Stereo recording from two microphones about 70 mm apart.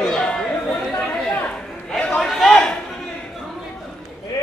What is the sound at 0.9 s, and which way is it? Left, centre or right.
Chatter, centre.